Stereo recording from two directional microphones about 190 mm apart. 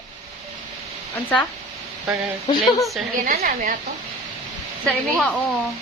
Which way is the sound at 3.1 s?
45° right (ahead or behind).